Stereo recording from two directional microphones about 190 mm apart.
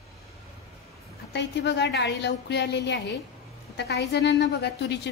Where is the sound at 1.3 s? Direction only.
65° left (ahead or behind).